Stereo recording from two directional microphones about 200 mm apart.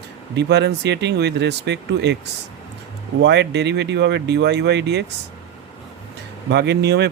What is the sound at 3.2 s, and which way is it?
Speech, 55° right (ahead or behind).